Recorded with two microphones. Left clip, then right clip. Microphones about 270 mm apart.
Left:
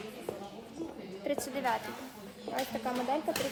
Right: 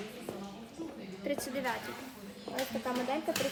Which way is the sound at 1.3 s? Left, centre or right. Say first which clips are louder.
Left 2 dB; centre.